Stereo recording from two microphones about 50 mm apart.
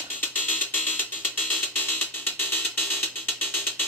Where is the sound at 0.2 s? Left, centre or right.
Left.